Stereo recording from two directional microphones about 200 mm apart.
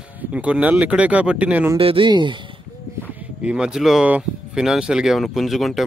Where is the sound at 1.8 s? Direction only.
25° right (ahead or behind).